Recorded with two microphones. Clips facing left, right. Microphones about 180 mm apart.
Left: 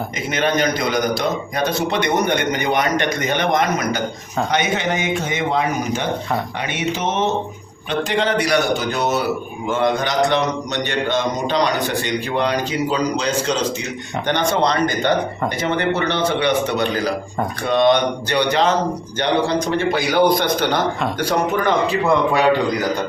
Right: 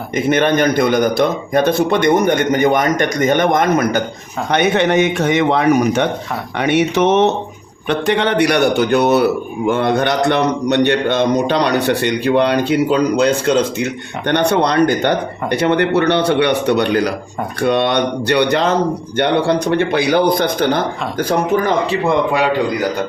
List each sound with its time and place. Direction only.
0.3 s a man's voice: 55° right (ahead or behind)